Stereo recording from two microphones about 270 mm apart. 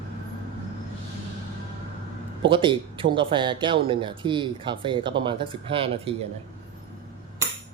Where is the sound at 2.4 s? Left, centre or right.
Centre.